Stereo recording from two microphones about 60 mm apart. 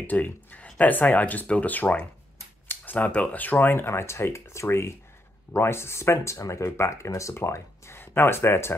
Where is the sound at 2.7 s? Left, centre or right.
Left.